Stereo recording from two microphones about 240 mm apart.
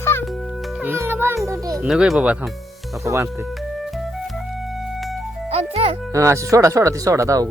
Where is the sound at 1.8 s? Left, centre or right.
Centre.